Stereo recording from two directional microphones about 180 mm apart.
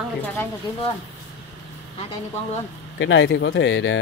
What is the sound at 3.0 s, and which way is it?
Speech, 90° left.